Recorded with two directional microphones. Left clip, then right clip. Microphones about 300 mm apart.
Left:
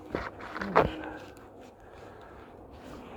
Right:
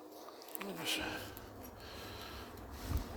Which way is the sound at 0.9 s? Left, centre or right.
Right.